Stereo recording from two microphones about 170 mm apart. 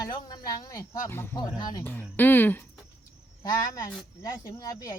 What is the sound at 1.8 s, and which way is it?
Speech, 10° left (ahead or behind).